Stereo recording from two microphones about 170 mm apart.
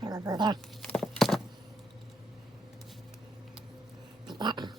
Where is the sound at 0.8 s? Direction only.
5° left (ahead or behind).